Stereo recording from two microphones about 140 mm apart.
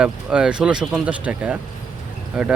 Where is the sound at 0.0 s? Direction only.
5° right (ahead or behind).